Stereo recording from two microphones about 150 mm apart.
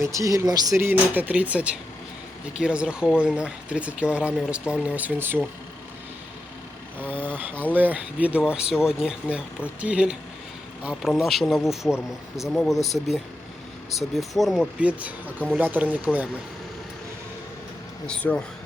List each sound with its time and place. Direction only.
0.0 s speech: 20° right (ahead or behind)
7.0 s speech: 10° left (ahead or behind)
7.3 s speech: 10° right (ahead or behind)
18.0 s speech: 10° left (ahead or behind)